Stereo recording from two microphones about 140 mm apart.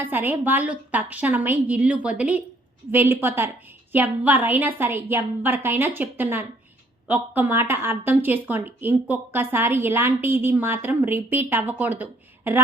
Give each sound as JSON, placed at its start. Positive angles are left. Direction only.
{"t": 0.0, "sound": "a woman's voice", "side_deg": -15}